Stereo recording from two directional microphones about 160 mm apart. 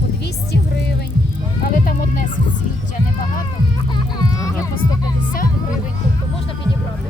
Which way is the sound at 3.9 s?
25° left (ahead or behind).